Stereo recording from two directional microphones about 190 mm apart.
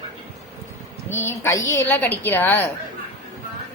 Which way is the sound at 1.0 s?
15° left (ahead or behind).